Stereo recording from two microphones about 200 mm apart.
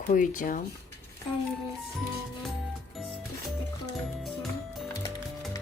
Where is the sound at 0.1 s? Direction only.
40° left (ahead or behind).